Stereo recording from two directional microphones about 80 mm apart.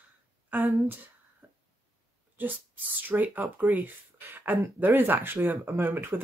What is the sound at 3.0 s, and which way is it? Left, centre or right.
Speech, right.